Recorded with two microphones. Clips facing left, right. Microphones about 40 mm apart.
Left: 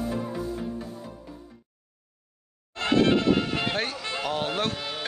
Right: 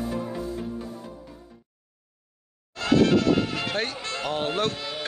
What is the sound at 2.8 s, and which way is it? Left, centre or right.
Music, left.